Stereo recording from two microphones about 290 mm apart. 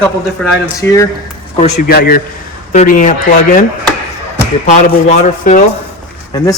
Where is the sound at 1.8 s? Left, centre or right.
Left.